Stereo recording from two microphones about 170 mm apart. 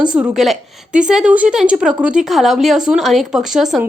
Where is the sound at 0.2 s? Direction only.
Centre (ahead or behind).